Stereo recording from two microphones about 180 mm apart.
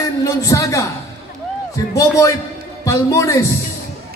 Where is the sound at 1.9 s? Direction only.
20° left (ahead or behind).